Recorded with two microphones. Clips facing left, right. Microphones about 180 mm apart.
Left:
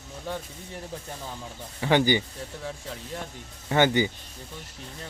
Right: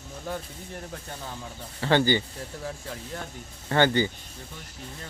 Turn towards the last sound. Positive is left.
turn(degrees=15)  # may be behind; listen again after turning